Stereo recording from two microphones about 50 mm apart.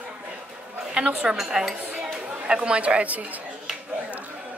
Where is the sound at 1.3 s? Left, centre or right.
Centre; by 3.5 s right.